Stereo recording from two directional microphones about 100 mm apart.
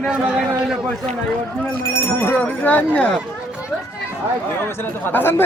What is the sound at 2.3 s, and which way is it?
Speech, 15° left (ahead or behind).